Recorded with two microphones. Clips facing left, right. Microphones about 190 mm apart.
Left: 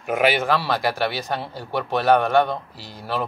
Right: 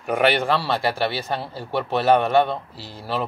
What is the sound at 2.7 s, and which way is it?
Speech, 30° right (ahead or behind).